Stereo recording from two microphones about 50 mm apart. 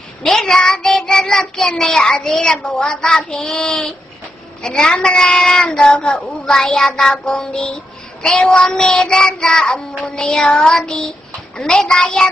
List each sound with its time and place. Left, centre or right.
0.2 s speech: centre
3.6 s a sound: left
4.6 s speech: centre